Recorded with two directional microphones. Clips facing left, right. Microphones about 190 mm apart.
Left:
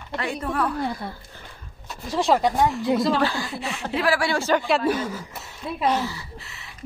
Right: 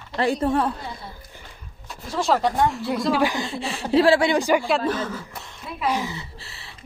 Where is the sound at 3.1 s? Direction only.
15° right (ahead or behind).